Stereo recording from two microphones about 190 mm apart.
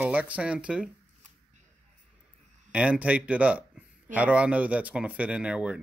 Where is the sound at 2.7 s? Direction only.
5° right (ahead or behind).